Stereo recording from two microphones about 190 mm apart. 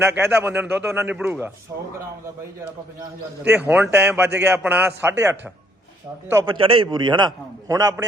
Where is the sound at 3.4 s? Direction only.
10° right (ahead or behind).